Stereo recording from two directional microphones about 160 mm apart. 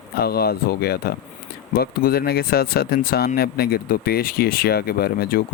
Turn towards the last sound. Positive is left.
turn(degrees=75)  # may be behind; listen again after turning